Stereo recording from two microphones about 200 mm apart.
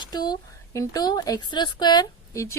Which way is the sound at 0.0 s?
20° left (ahead or behind).